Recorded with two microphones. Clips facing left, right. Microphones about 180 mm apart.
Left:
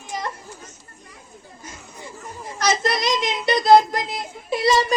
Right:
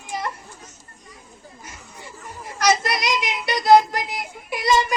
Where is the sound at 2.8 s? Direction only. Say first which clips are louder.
Left 2 dB; 25° left (ahead or behind).